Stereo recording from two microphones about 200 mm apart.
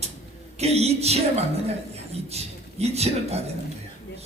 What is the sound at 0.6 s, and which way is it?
A man's voice, 30° right (ahead or behind).